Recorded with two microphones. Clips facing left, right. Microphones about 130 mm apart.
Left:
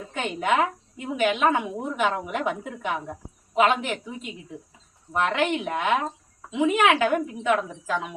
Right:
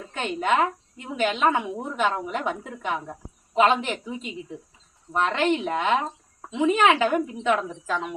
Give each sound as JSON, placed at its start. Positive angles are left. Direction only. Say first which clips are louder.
{"t": 0.1, "sound": "a woman's voice", "louder": "right 1 dB", "side_deg": 5}